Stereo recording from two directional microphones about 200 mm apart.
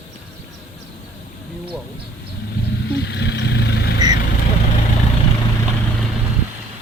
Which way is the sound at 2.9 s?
60° left (ahead or behind).